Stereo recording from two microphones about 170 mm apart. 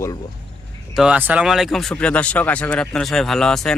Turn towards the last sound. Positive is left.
turn(degrees=5)  # may be behind; listen again after turning